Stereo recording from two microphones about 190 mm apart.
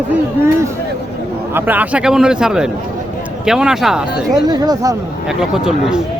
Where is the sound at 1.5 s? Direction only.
10° right (ahead or behind).